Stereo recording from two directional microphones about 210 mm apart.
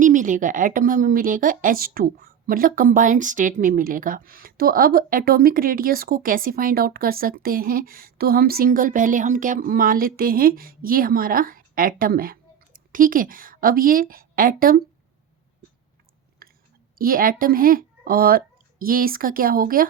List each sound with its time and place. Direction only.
0.0 s a woman's voice: 35° right (ahead or behind)
16.4 s chewing: 45° right (ahead or behind)
17.0 s speech: 40° right (ahead or behind)